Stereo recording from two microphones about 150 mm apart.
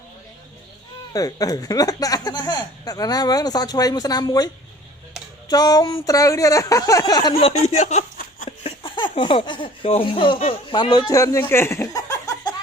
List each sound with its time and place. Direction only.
1.1 s speech: 25° left (ahead or behind)
5.5 s speech: 25° left (ahead or behind)
7.4 s speech: 45° left (ahead or behind); by 12.5 s 20° left (ahead or behind)